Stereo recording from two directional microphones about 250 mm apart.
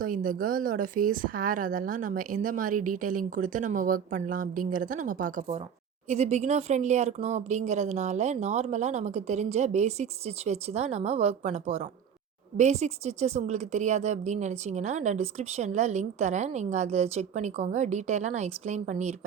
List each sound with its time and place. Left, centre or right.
0.0 s a woman's voice: right